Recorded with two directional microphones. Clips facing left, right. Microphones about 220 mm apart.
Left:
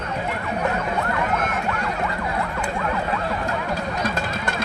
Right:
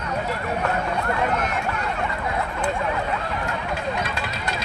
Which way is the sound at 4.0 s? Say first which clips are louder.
Left 3 dB; 45° left (ahead or behind).